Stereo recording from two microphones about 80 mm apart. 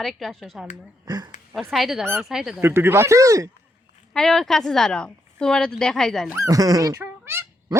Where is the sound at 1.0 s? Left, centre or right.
Right.